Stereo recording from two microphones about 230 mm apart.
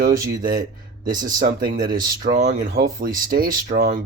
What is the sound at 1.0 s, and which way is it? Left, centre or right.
Speech, right.